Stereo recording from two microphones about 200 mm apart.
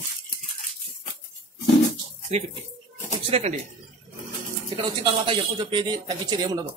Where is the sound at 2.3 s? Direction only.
30° right (ahead or behind).